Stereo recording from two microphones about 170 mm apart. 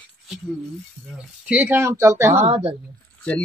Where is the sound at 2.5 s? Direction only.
35° right (ahead or behind).